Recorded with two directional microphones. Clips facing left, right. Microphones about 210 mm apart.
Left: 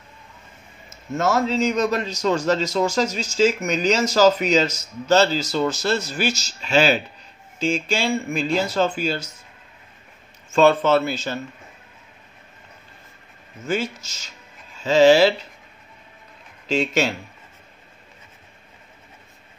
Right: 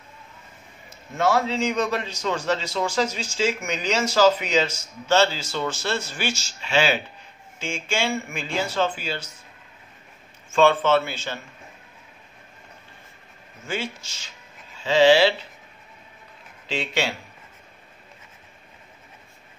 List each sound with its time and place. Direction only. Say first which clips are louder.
0.8 s a man's voice: left 1 dB; 45° left (ahead or behind)
10.5 s a man's voice: left 2 dB; 40° left (ahead or behind)
13.7 s a man's voice: left 6 dB; 40° left (ahead or behind)
16.6 s speech: left 6 dB; 45° left (ahead or behind)